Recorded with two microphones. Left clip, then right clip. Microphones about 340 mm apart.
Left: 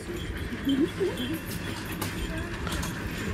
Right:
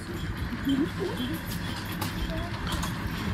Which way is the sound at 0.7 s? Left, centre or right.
Right.